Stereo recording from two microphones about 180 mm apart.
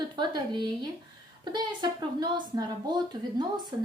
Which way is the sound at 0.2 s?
25° right (ahead or behind).